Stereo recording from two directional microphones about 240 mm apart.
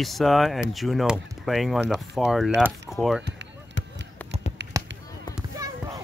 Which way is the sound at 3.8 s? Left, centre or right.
Left.